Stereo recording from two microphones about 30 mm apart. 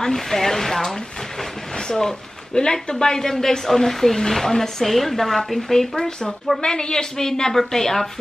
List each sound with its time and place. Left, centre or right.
0.0 s speech: centre
1.8 s a woman's voice: left; by 5.9 s centre
5.9 s a woman's voice: left